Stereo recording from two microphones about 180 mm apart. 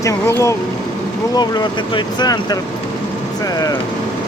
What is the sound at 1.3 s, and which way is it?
Speech, 25° left (ahead or behind).